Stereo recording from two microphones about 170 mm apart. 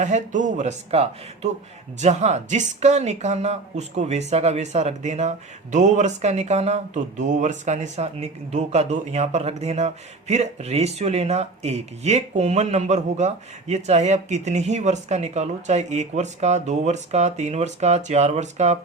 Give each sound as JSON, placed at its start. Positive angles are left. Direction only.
{"t": 0.0, "sound": "speech", "side_deg": -45}